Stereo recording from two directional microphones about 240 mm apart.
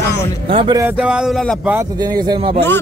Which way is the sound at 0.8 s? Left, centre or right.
Centre.